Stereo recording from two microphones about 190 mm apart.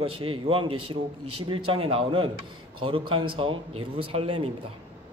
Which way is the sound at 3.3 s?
30° right (ahead or behind).